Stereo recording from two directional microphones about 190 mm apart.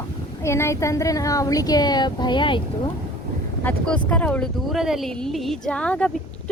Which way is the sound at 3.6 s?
5° left (ahead or behind).